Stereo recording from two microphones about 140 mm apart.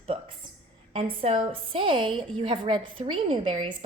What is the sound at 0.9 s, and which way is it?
A woman's voice, 45° right (ahead or behind).